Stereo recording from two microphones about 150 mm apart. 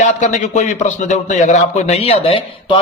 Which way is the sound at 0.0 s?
55° left (ahead or behind).